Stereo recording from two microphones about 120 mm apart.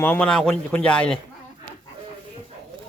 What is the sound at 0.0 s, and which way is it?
Speech, 10° left (ahead or behind).